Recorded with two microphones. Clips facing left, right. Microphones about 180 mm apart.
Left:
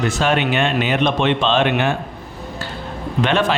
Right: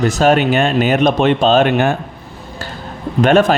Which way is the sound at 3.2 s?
45° right (ahead or behind).